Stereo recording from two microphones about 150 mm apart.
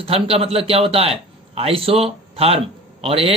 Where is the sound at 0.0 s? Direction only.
40° right (ahead or behind).